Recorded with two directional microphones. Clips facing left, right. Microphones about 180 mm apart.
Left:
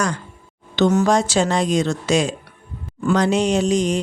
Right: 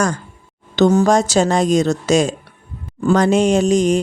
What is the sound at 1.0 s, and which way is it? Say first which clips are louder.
Speech: right 3 dB; 45° right (ahead or behind).